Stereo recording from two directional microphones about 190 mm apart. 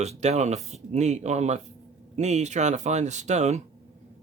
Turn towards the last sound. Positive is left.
turn(degrees=-35)  # may be behind; listen again after turning